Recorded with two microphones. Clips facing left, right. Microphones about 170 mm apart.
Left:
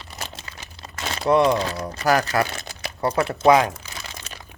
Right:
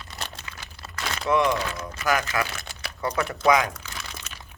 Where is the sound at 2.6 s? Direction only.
20° left (ahead or behind).